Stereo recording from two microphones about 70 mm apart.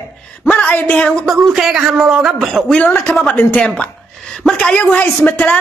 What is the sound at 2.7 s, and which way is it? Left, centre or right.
Speech, left.